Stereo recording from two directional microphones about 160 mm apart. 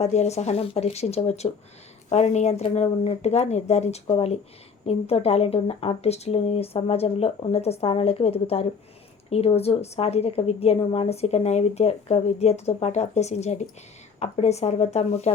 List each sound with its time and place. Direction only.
0.0 s a woman's voice: 45° left (ahead or behind)